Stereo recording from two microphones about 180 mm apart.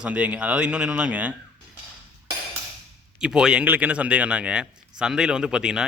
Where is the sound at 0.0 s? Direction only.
5° right (ahead or behind).